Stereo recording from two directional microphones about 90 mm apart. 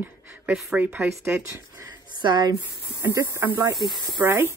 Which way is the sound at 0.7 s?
25° right (ahead or behind).